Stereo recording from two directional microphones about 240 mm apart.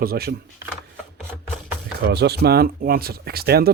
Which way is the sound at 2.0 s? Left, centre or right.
Right.